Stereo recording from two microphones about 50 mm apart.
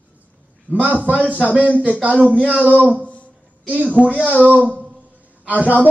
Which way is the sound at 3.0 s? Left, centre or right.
Left.